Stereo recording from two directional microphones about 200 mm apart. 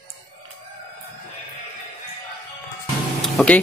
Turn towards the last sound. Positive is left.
turn(degrees=5)  # may be behind; listen again after turning